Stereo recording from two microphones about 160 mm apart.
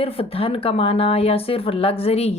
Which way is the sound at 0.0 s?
35° left (ahead or behind).